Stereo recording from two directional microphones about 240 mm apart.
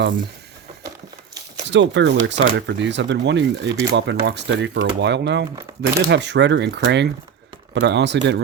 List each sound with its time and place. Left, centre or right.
1.7 s speech: right